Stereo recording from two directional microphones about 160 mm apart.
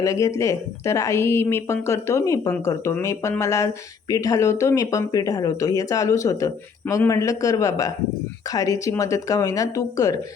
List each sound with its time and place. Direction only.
0.0 s speech: 20° left (ahead or behind)